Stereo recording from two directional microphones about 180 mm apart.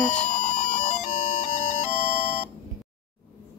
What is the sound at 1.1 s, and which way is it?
Music, 45° left (ahead or behind).